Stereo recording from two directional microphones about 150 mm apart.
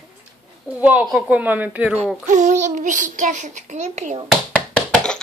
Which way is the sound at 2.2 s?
55° right (ahead or behind).